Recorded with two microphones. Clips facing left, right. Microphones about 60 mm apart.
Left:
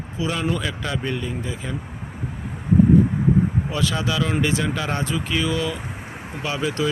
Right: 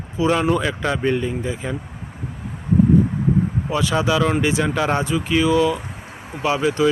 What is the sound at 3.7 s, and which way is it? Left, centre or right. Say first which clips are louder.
Speech: right 4 dB; centre.